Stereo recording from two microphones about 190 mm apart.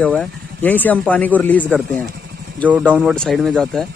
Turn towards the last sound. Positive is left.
turn(degrees=0)  # may be behind; listen again after turning